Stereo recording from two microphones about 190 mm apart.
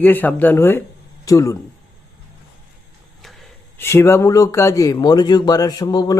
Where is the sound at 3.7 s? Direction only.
15° left (ahead or behind).